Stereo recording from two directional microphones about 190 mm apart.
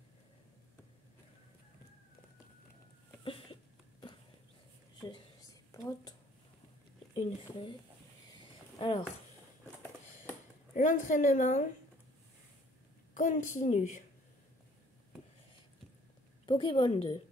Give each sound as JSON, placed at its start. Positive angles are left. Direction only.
{"t": 3.3, "sound": "a sound", "side_deg": 30}
{"t": 5.0, "sound": "a sound", "side_deg": 20}
{"t": 7.2, "sound": "a woman's voice", "side_deg": 20}
{"t": 8.7, "sound": "speech", "side_deg": 30}
{"t": 10.7, "sound": "a woman's voice", "side_deg": 40}
{"t": 13.1, "sound": "a woman's voice", "side_deg": 45}
{"t": 16.4, "sound": "a woman's voice", "side_deg": 25}